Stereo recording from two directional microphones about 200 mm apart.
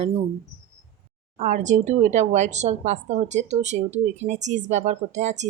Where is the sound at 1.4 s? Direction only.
35° right (ahead or behind).